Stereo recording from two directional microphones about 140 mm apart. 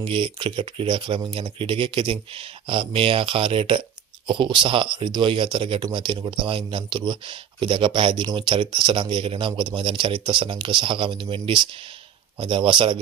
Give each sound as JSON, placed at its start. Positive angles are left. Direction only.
{"t": 0.0, "sound": "speech", "side_deg": -40}